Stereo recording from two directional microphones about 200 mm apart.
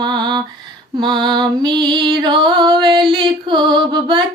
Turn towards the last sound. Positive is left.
turn(degrees=-25)  # may be behind; listen again after turning